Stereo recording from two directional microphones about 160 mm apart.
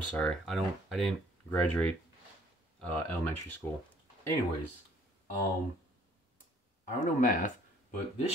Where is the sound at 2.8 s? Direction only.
10° left (ahead or behind).